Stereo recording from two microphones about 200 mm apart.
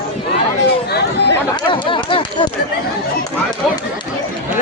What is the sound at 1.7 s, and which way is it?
Speech, 25° left (ahead or behind).